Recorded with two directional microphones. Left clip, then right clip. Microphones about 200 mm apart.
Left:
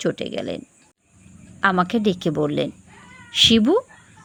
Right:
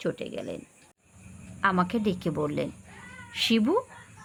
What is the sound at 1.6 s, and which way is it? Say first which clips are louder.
Speech: left 6 dB; 25° left (ahead or behind).